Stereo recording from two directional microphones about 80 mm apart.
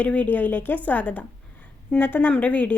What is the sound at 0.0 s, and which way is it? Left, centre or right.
Speech, centre.